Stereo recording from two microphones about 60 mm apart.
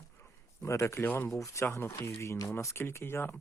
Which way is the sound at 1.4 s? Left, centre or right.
Left.